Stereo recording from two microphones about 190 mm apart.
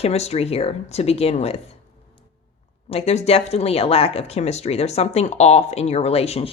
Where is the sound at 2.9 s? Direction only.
35° left (ahead or behind).